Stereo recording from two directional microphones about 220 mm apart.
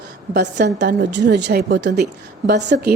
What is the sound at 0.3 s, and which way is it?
A woman's voice, 50° right (ahead or behind).